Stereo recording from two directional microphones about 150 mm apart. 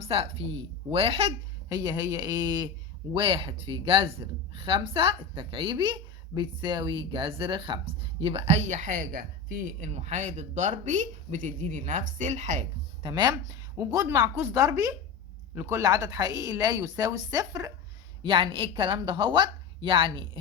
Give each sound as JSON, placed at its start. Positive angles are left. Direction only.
{"t": 0.0, "sound": "speech", "side_deg": -40}
{"t": 1.7, "sound": "speech", "side_deg": -25}
{"t": 13.0, "sound": "speech", "side_deg": -30}
{"t": 18.2, "sound": "speech", "side_deg": -35}